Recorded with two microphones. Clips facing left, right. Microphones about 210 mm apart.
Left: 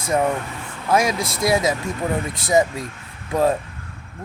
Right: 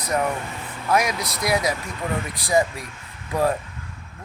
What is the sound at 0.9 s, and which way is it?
Speech, 25° left (ahead or behind).